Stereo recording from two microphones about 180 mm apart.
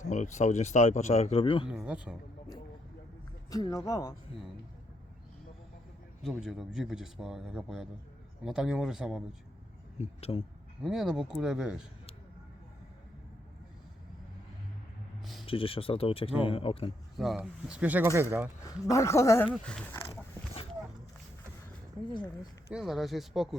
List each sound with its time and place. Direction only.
0.0 s a man's voice: 40° left (ahead or behind)
1.6 s speech: 5° right (ahead or behind)
3.5 s speech: 20° left (ahead or behind)
6.3 s speech: centre (ahead or behind)
10.0 s a man's voice: 35° left (ahead or behind)
10.8 s speech: 5° right (ahead or behind)
15.2 s a sound: centre (ahead or behind)
15.4 s a man's voice: 30° left (ahead or behind)
17.2 s speech: 5° right (ahead or behind)
18.9 s speech: 15° left (ahead or behind)
20.1 s dog: 30° left (ahead or behind)
22.7 s speech: centre (ahead or behind)